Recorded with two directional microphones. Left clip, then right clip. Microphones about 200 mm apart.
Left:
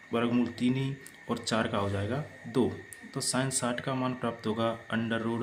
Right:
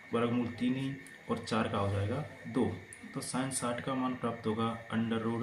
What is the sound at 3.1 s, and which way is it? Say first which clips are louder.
Speech: left 6 dB; 55° left (ahead or behind).